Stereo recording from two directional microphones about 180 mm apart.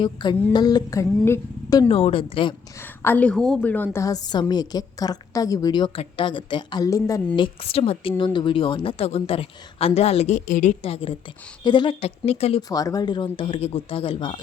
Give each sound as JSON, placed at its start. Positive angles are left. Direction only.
{"t": 0.0, "sound": "a woman's voice", "side_deg": 25}
{"t": 1.9, "sound": "speech", "side_deg": 30}
{"t": 2.8, "sound": "a woman's voice", "side_deg": 10}
{"t": 12.6, "sound": "a woman's voice", "side_deg": 20}